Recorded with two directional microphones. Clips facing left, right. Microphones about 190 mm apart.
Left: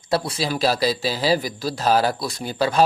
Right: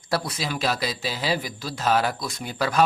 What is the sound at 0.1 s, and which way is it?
Speech, 30° left (ahead or behind).